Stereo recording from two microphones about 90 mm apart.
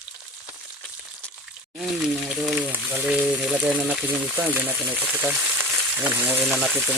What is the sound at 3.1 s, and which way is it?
Speech, 10° right (ahead or behind).